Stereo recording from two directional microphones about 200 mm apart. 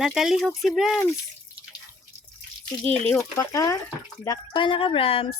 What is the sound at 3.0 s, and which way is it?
Speech, 15° left (ahead or behind).